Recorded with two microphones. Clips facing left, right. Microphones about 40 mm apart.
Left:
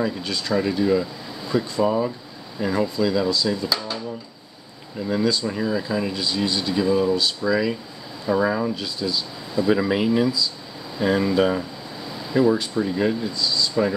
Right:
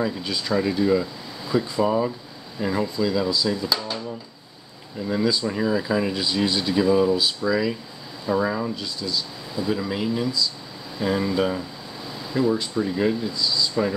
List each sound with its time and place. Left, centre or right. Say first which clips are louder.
0.0 s speech: left 1 dB; centre
5.0 s speech: left 1 dB; centre
9.7 s speech: left 5 dB; left
12.5 s speech: left 1 dB; centre